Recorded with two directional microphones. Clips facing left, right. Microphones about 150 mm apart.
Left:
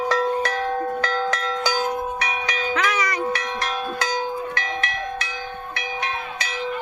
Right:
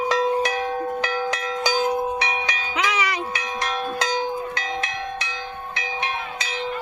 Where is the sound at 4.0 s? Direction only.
20° right (ahead or behind).